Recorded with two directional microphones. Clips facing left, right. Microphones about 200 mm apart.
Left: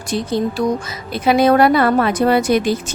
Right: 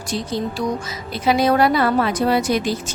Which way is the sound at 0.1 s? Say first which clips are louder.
Left 5 dB; 55° left (ahead or behind).